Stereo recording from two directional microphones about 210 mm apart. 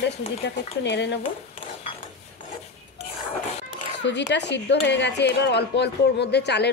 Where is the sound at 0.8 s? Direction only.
55° left (ahead or behind).